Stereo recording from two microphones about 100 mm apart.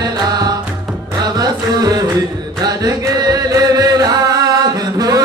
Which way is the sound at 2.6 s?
40° right (ahead or behind).